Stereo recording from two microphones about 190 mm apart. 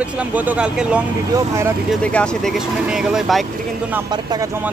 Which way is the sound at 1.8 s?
5° left (ahead or behind).